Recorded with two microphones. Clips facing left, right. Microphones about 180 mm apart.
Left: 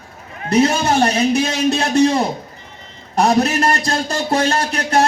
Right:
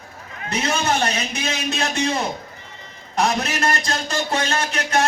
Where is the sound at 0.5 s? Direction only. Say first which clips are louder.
Left 8 dB; 40° left (ahead or behind).